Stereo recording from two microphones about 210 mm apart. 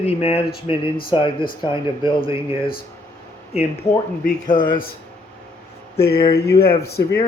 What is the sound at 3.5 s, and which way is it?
Speech, 30° left (ahead or behind).